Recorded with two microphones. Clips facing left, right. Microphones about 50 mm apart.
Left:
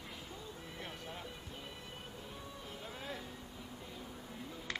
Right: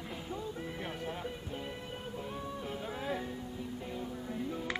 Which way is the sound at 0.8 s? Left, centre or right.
Right.